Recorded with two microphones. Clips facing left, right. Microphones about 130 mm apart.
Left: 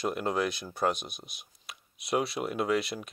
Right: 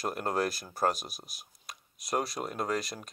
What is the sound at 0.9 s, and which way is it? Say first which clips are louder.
Speech: left 2 dB; centre (ahead or behind).